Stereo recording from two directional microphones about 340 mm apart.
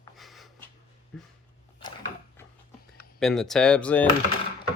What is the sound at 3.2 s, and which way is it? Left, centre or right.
Speech, centre.